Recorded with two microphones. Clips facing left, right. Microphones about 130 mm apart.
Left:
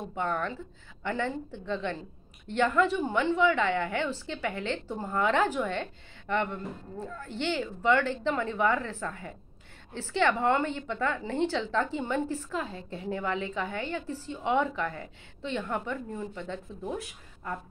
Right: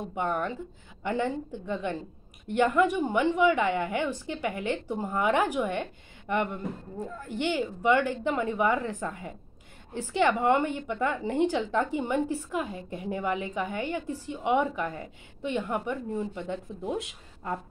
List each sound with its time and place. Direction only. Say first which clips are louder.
0.1 s a woman's voice: right 1 dB; 15° right (ahead or behind)